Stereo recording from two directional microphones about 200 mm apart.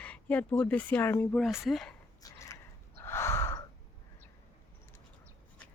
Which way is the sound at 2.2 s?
15° left (ahead or behind).